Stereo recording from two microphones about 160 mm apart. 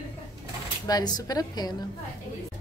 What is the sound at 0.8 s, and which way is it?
Speech, 25° left (ahead or behind).